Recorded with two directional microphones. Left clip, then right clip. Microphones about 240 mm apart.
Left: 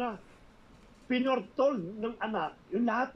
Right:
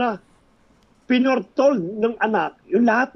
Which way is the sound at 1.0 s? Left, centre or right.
Right.